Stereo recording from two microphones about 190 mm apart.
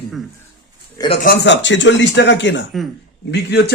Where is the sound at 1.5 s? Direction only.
75° left (ahead or behind).